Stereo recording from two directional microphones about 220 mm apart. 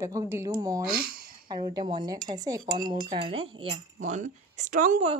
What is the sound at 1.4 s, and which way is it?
A woman's voice, 20° right (ahead or behind).